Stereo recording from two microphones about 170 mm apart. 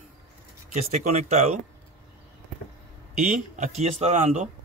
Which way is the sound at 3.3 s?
45° right (ahead or behind).